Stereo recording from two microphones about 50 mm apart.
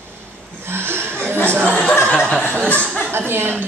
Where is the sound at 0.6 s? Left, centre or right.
Right.